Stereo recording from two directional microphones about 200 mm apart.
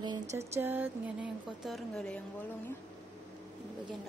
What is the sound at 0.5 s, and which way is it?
Speech, 10° right (ahead or behind).